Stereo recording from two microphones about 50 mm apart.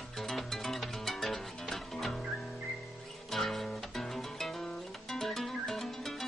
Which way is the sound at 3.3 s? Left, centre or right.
Centre.